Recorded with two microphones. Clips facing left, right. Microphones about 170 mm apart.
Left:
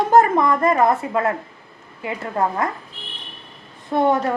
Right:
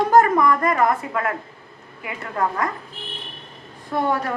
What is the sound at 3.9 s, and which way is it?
Speech, 25° left (ahead or behind).